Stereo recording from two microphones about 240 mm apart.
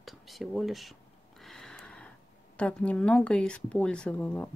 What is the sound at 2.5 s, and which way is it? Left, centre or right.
Speech, centre.